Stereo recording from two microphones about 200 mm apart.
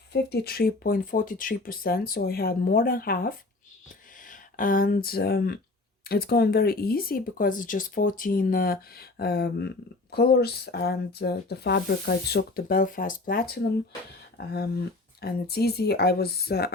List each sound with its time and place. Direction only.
0.1 s speech: 55° left (ahead or behind)